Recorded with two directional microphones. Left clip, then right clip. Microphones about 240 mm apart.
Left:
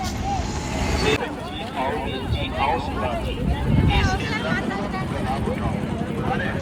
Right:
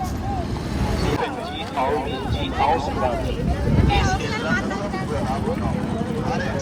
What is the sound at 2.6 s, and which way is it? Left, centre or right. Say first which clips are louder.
Vehicle: right 3 dB; right.